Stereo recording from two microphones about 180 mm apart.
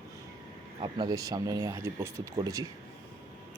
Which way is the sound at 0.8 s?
25° right (ahead or behind).